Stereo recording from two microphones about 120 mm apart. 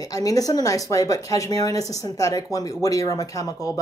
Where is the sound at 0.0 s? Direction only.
30° left (ahead or behind).